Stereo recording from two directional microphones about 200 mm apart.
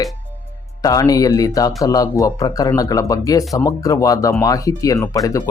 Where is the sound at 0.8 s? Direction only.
15° left (ahead or behind).